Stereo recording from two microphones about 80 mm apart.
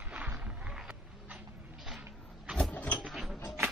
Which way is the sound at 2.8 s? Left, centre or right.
Centre.